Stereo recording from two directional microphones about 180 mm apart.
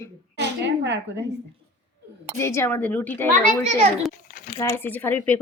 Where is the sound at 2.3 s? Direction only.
15° left (ahead or behind).